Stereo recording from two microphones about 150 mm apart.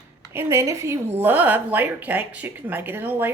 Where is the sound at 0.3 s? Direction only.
15° right (ahead or behind).